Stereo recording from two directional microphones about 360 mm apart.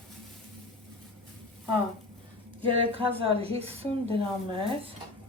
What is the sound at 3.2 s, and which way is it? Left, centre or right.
Speech, centre.